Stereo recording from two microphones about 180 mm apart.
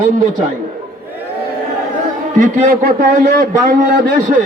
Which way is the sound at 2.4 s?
50° right (ahead or behind).